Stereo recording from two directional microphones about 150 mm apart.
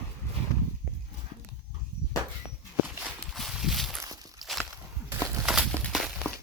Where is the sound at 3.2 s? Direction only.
Centre (ahead or behind).